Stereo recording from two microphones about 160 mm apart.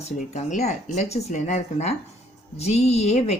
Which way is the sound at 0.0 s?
45° left (ahead or behind).